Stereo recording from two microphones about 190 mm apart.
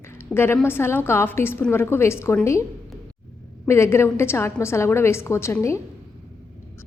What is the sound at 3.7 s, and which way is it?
A woman's voice, 15° left (ahead or behind).